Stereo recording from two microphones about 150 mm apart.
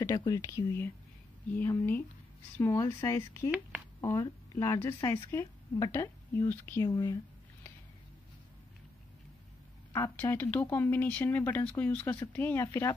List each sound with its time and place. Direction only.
0.0 s a woman's voice: 25° left (ahead or behind)
9.9 s speech: 20° left (ahead or behind)